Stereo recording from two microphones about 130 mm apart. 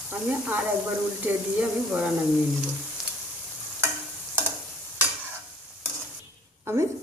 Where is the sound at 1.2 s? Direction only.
15° right (ahead or behind).